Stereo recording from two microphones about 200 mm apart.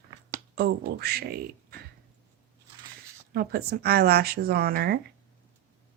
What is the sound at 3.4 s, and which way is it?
Speech, 50° right (ahead or behind).